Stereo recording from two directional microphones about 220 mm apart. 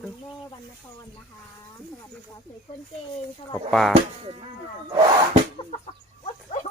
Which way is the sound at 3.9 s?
25° right (ahead or behind).